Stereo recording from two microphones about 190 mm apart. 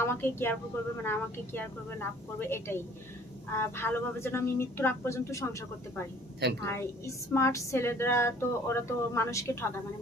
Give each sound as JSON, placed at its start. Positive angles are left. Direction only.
{"t": 0.0, "sound": "speech", "side_deg": 10}